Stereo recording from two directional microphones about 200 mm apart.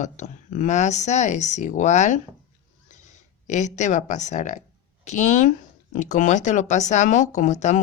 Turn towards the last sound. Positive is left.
turn(degrees=35)  # may be behind; listen again after turning